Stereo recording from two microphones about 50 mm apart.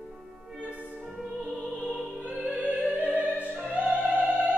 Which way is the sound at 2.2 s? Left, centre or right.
Right.